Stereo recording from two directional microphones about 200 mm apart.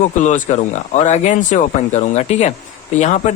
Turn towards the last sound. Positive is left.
turn(degrees=35)  # may be behind; listen again after turning